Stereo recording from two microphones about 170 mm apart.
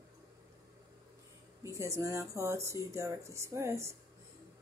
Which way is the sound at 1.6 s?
15° right (ahead or behind).